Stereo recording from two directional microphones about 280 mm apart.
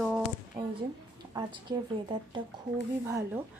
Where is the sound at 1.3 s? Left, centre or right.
Centre.